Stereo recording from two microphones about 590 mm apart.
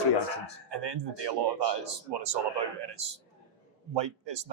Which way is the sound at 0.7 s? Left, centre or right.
Right.